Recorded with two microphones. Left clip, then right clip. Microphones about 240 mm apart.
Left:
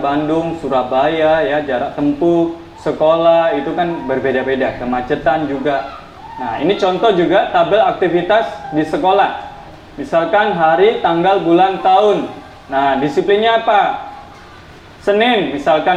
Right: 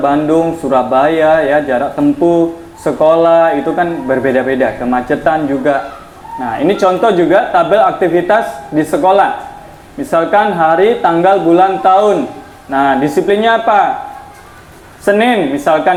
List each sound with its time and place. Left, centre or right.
0.0 s speech: right
2.8 s speech: right
15.0 s speech: right